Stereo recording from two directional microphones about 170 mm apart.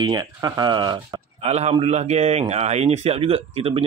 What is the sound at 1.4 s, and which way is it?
Speech, 40° right (ahead or behind).